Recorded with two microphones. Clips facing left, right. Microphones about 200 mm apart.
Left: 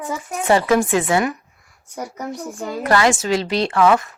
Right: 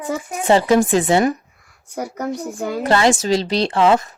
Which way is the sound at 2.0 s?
60° right (ahead or behind).